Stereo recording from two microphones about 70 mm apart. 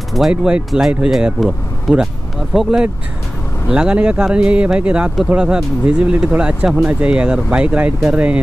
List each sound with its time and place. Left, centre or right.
0.2 s speech: centre